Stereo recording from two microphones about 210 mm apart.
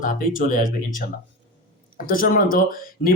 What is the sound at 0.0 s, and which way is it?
Speech, 40° left (ahead or behind).